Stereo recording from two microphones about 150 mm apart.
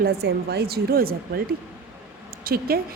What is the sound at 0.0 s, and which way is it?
A woman's voice, 90° right.